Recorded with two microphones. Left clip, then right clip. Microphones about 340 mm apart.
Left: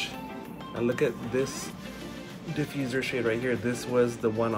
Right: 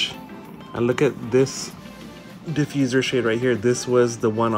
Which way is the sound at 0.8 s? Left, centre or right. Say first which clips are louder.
Right 7 dB; right.